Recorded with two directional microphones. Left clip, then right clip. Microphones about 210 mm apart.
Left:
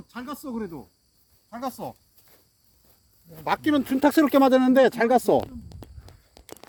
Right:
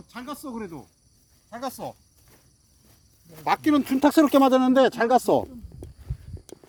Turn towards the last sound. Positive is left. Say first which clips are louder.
# even
turn(degrees=5)  # may be behind; listen again after turning